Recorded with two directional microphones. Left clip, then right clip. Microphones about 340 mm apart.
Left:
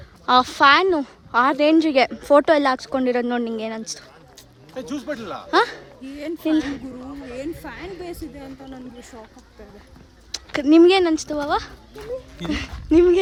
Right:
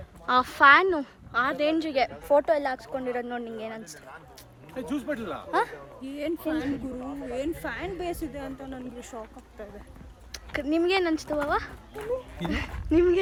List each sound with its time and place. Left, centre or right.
0.3 s a woman's voice: centre
6.1 s speech: centre
10.3 s a woman's voice: centre